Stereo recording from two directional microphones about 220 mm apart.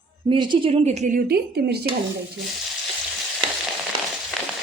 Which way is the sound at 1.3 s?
45° right (ahead or behind).